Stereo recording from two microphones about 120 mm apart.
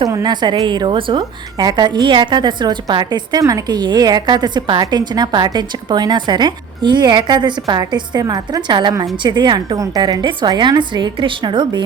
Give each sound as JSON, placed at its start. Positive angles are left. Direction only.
{"t": 0.0, "sound": "a woman's voice", "side_deg": -30}